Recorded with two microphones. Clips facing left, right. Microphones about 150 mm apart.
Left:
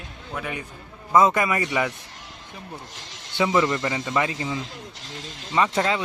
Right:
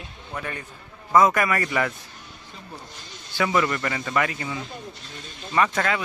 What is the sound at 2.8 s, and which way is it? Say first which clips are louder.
Snake: left 1 dB; 90° left.